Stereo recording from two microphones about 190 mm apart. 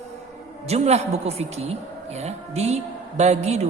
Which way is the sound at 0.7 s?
35° right (ahead or behind).